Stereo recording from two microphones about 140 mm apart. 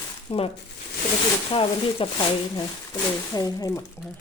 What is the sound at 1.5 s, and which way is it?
Speech, 35° left (ahead or behind).